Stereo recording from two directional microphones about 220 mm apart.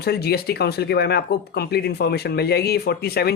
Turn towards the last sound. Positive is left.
turn(degrees=45)  # may be behind; listen again after turning